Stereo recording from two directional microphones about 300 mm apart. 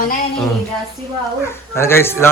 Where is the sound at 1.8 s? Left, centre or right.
Centre.